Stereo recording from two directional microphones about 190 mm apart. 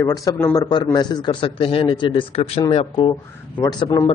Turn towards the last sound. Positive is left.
turn(degrees=25)  # may be behind; listen again after turning